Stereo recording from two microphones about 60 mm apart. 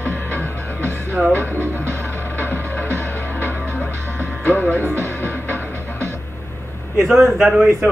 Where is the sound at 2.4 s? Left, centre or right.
Left.